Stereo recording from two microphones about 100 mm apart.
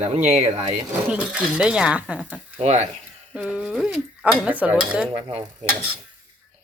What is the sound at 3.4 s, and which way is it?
Speech, 15° right (ahead or behind).